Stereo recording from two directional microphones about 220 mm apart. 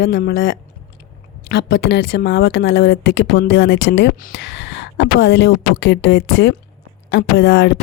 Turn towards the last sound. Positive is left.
turn(degrees=55)  # may be behind; listen again after turning